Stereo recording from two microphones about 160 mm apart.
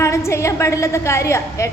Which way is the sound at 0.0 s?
15° left (ahead or behind).